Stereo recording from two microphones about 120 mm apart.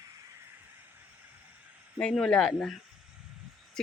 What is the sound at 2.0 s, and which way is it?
Speech, 5° left (ahead or behind).